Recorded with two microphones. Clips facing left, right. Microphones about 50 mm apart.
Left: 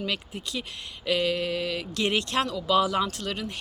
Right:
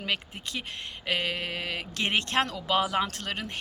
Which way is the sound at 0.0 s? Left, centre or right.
Right.